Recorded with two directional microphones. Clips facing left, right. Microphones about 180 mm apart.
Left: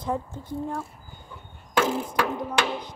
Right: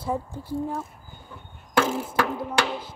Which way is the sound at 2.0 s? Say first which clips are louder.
Right 1 dB; 5° right (ahead or behind).